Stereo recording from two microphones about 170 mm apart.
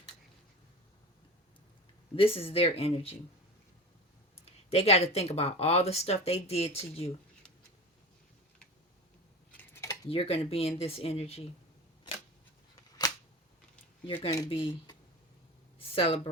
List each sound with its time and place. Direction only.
2.1 s speech: 35° left (ahead or behind)
4.4 s speech: 35° left (ahead or behind)
9.6 s a sound: 20° left (ahead or behind)
10.1 s speech: 35° left (ahead or behind)
14.2 s speech: 20° left (ahead or behind)